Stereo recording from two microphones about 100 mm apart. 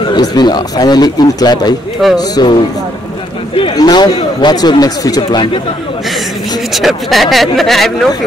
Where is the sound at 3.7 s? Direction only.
45° left (ahead or behind).